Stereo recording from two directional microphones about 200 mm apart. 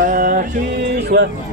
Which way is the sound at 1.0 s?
55° right (ahead or behind).